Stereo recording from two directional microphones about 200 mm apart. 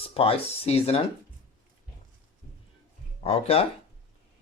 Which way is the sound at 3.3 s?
30° left (ahead or behind).